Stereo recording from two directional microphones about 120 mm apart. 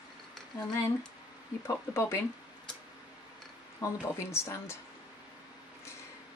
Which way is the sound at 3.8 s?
30° left (ahead or behind).